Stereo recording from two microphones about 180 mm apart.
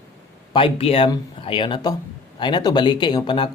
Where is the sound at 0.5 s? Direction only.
30° left (ahead or behind).